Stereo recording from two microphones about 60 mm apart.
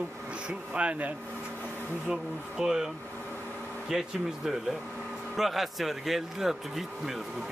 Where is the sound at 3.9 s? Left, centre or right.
Centre.